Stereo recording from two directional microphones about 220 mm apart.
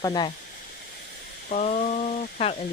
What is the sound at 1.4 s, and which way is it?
Frying, 30° left (ahead or behind).